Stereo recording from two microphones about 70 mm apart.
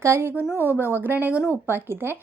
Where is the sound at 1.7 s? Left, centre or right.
Right.